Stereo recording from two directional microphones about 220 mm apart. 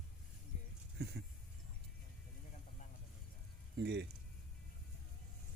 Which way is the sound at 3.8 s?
50° right (ahead or behind).